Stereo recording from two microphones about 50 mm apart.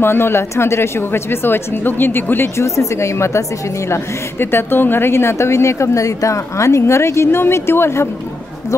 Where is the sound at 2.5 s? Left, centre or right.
Left.